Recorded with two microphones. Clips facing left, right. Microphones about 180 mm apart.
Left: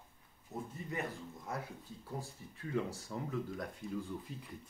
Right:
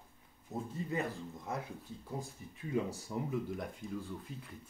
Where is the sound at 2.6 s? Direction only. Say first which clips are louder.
Right 2 dB; 15° right (ahead or behind).